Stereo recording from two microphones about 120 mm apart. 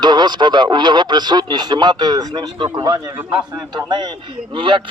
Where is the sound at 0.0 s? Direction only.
40° right (ahead or behind).